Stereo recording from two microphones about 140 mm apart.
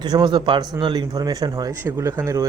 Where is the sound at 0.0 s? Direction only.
30° right (ahead or behind).